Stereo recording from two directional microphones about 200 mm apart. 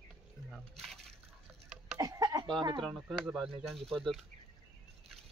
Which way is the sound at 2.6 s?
25° right (ahead or behind).